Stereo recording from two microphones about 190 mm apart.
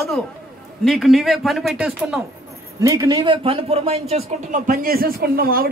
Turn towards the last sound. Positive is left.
turn(degrees=-50)  # may be behind; listen again after turning